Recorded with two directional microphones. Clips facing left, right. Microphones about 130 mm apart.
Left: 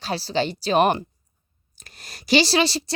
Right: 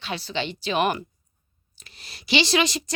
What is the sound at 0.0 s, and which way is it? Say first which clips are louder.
A woman's voice: left 5 dB; 35° left (ahead or behind).